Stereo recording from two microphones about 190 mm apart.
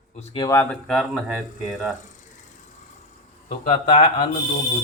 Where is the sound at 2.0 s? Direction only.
40° left (ahead or behind).